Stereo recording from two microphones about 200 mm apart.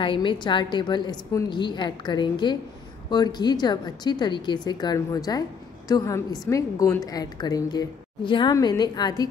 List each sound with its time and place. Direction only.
0.0 s a woman's voice: 25° left (ahead or behind)